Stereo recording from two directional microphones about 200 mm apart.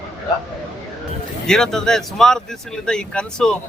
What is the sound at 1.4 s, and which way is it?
A man's voice, 5° left (ahead or behind).